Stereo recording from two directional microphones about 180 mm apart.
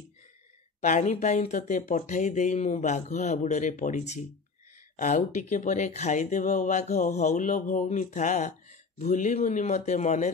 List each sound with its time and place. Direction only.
0.7 s speech: 45° left (ahead or behind)